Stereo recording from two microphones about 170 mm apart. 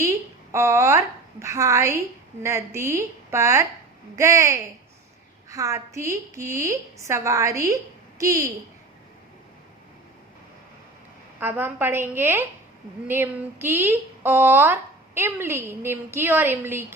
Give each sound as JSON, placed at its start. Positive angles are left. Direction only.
{"t": 0.5, "sound": "a woman's voice", "side_deg": -15}
{"t": 11.3, "sound": "speech", "side_deg": -10}